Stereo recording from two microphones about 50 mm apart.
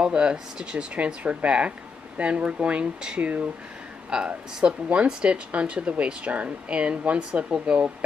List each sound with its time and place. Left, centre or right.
0.0 s speech: centre